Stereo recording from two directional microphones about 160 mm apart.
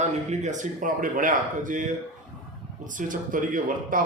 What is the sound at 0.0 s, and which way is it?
A man's voice, 45° right (ahead or behind).